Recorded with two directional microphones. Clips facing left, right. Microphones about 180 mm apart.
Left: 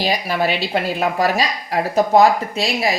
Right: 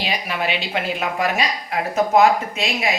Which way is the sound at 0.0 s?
35° left (ahead or behind).